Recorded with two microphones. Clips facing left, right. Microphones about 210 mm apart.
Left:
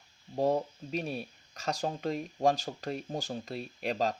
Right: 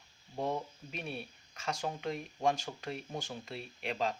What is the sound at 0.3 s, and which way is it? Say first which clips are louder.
Speech: left 7 dB; 35° left (ahead or behind).